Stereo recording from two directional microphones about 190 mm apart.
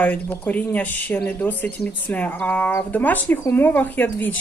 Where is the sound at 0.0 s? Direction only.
10° left (ahead or behind).